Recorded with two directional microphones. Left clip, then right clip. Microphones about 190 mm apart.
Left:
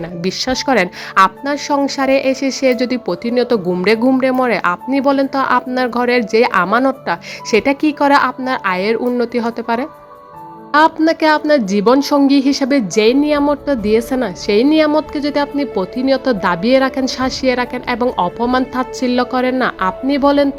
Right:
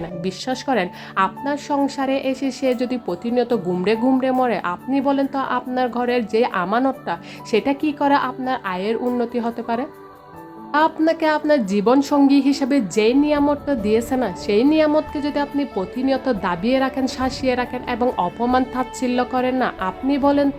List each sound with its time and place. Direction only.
0.2 s a woman's voice: 15° left (ahead or behind)